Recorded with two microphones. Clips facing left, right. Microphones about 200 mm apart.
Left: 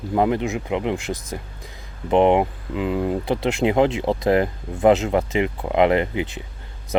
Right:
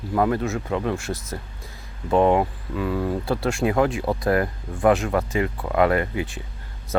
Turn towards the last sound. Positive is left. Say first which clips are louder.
# left 3 dB
turn(degrees=20)  # may be behind; listen again after turning